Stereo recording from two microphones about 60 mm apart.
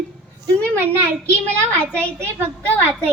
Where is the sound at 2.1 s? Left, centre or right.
Right.